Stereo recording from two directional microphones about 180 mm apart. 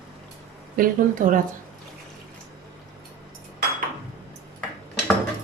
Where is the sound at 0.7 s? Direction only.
50° right (ahead or behind).